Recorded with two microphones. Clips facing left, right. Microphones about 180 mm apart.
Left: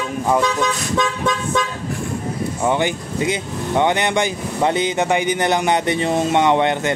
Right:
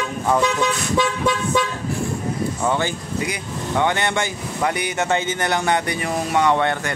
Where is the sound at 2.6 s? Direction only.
20° left (ahead or behind).